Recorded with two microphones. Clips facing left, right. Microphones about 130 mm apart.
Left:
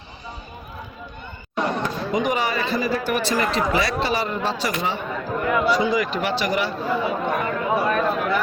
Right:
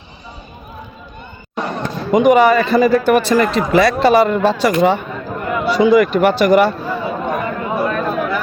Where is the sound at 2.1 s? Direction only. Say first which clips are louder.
Right 13 dB; 60° right (ahead or behind).